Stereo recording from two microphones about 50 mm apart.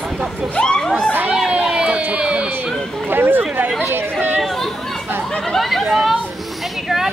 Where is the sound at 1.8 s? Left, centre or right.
Right.